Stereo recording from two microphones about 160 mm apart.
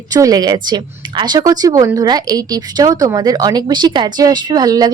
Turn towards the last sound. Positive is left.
turn(degrees=-25)  # may be behind; listen again after turning